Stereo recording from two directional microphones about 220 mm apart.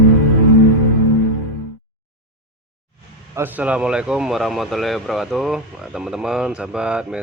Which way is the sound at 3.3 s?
10° right (ahead or behind).